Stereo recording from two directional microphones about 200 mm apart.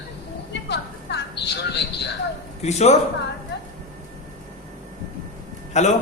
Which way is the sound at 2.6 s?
35° left (ahead or behind).